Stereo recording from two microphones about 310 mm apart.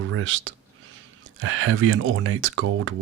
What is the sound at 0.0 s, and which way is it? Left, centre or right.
Speech, right.